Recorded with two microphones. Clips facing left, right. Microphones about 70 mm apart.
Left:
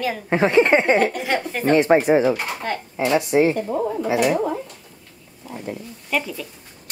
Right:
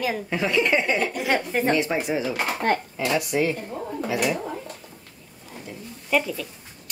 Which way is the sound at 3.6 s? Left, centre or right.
Left.